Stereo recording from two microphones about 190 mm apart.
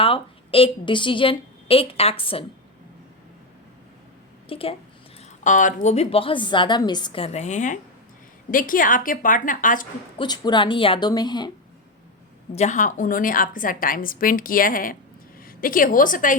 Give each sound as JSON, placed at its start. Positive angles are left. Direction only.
{"t": 0.0, "sound": "a woman's voice", "side_deg": 30}
{"t": 4.4, "sound": "speech", "side_deg": 30}
{"t": 5.4, "sound": "a woman's voice", "side_deg": 40}
{"t": 10.2, "sound": "a woman's voice", "side_deg": 20}
{"t": 12.5, "sound": "a woman's voice", "side_deg": 40}